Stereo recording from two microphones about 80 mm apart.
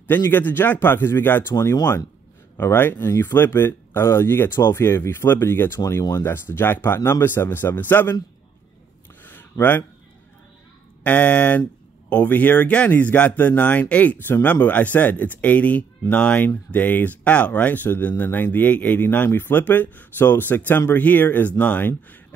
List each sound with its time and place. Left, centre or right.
0.0 s speech: left
2.5 s speech: left
9.2 s a sound: left
11.1 s speech: centre